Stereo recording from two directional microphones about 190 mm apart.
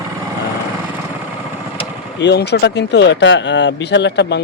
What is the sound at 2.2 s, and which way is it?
Speech, 60° left (ahead or behind).